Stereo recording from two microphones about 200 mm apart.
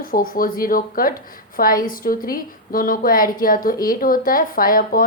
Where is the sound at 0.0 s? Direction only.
45° left (ahead or behind).